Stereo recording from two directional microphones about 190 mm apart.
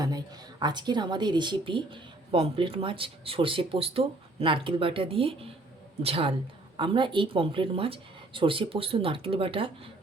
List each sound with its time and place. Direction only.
0.0 s a woman's voice: 20° right (ahead or behind)